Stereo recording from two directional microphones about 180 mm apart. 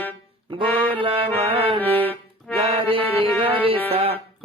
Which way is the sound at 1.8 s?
10° left (ahead or behind).